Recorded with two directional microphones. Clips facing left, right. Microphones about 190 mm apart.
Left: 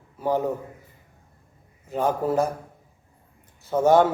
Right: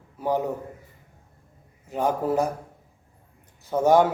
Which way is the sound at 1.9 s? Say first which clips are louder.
Left 1 dB; 15° right (ahead or behind).